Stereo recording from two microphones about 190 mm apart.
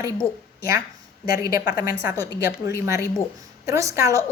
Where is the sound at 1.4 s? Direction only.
50° left (ahead or behind).